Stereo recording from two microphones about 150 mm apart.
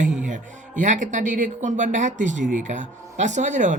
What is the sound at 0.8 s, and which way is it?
Speech, 55° right (ahead or behind).